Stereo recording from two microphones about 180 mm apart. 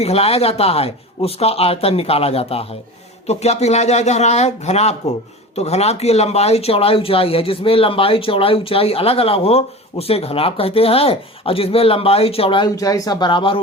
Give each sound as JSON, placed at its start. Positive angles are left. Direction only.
{"t": 0.0, "sound": "speech", "side_deg": 35}